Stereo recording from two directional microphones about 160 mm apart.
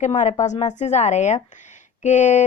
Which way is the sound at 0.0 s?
50° left (ahead or behind).